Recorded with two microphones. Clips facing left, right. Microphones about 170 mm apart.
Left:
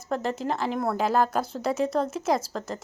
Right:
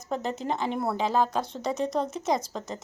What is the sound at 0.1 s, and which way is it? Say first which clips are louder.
A woman's voice: left 2 dB; centre (ahead or behind).